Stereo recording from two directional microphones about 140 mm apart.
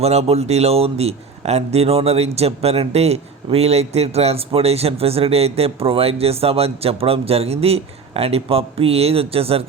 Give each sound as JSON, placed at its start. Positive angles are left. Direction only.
{"t": 0.0, "sound": "a man's voice", "side_deg": -50}